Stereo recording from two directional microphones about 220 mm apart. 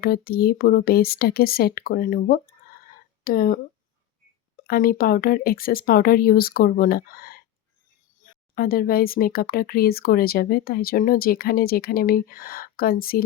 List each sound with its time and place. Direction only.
0.0 s speech: 45° left (ahead or behind)
4.6 s speech: 40° left (ahead or behind)